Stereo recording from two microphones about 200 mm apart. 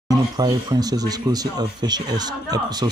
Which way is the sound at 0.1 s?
20° right (ahead or behind).